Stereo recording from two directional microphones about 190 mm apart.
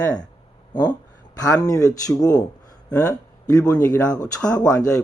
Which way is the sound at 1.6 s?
20° left (ahead or behind).